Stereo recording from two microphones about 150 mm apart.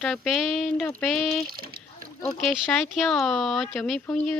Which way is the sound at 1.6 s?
85° right.